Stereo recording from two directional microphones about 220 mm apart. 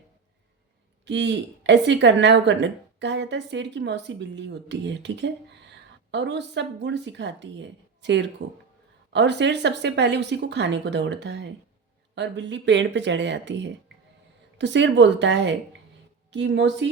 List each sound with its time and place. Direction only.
1.0 s speech: 55° right (ahead or behind)